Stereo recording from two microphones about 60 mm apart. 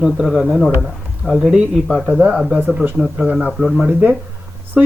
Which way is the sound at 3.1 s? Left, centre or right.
Centre.